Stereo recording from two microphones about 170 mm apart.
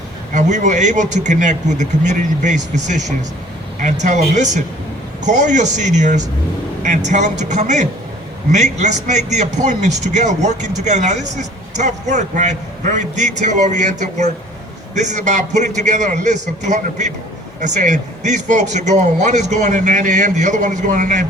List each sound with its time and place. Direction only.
0.3 s a man's voice: 45° right (ahead or behind)